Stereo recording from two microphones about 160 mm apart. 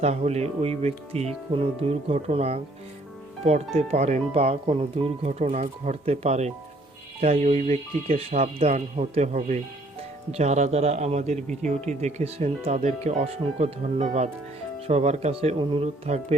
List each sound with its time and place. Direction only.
0.0 s speech: 45° right (ahead or behind)